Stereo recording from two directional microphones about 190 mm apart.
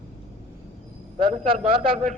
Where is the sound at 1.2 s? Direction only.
30° right (ahead or behind).